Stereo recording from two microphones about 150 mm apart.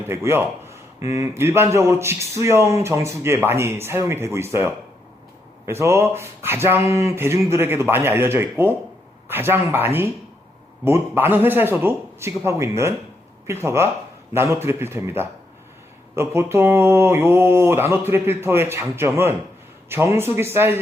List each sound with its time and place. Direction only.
0.1 s a man's voice: 15° right (ahead or behind)